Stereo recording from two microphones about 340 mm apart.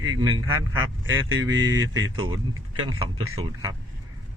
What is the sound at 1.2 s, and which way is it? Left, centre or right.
Speech, right.